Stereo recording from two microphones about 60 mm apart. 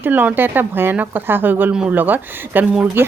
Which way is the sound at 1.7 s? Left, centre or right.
Centre.